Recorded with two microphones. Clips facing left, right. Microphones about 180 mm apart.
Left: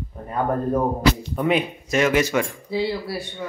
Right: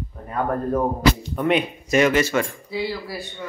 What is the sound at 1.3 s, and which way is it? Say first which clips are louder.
Speech: even; centre (ahead or behind).